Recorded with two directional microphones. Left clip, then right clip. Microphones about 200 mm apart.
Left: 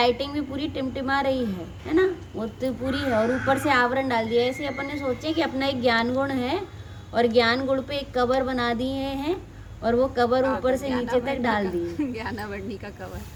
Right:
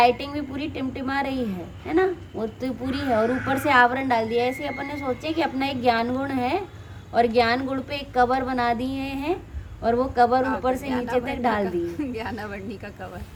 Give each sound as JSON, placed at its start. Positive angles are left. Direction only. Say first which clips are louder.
{"t": 0.0, "sound": "a woman's voice", "louder": "right 3 dB", "side_deg": -20}